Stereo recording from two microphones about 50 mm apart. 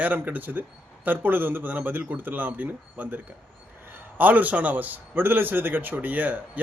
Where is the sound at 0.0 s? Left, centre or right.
Right.